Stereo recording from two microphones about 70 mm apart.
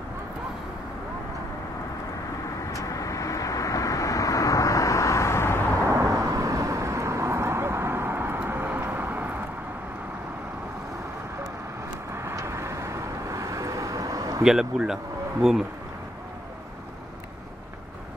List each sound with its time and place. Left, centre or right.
2.7 s vehicle: left
5.9 s vehicle: right
12.4 s vehicle: right
14.4 s a man's voice: centre